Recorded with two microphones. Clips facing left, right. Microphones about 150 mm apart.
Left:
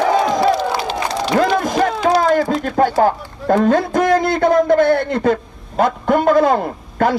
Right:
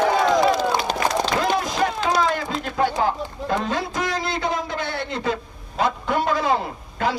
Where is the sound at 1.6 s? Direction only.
50° left (ahead or behind).